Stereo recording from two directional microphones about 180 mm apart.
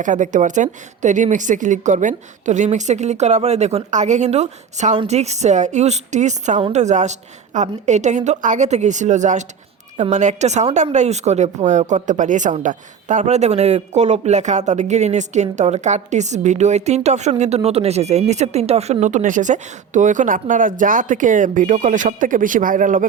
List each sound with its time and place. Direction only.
0.0 s a woman's voice: 45° right (ahead or behind)